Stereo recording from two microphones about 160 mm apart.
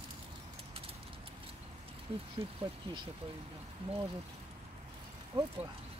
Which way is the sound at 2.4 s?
35° right (ahead or behind).